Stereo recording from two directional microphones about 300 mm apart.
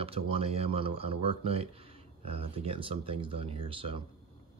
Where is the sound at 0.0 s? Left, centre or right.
Centre.